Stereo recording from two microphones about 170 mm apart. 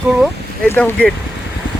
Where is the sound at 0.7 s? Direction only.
10° left (ahead or behind).